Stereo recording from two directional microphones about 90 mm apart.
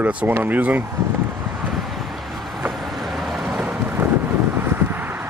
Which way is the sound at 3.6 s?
15° right (ahead or behind).